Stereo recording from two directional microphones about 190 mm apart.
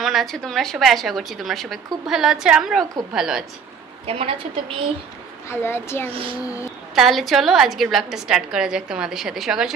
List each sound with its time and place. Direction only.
0.0 s a woman's voice: centre (ahead or behind)
4.0 s a woman's voice: 30° right (ahead or behind)
5.5 s speech: 10° left (ahead or behind)
6.0 s a woman's voice: 30° right (ahead or behind)
6.4 s speech: 15° left (ahead or behind)
7.0 s a woman's voice: centre (ahead or behind)